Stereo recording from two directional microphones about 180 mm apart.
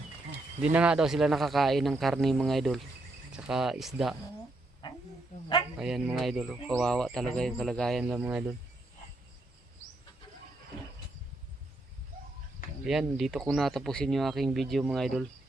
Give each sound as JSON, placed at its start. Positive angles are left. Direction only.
{"t": 0.6, "sound": "speech", "side_deg": -5}
{"t": 4.8, "sound": "a sound", "side_deg": 25}
{"t": 5.7, "sound": "speech", "side_deg": 0}
{"t": 12.8, "sound": "speech", "side_deg": 0}